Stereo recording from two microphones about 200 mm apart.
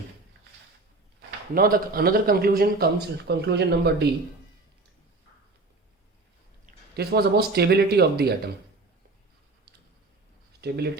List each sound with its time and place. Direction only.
1.5 s a man's voice: 45° right (ahead or behind)
6.7 s a man's voice: 50° right (ahead or behind)
10.6 s speech: 55° right (ahead or behind)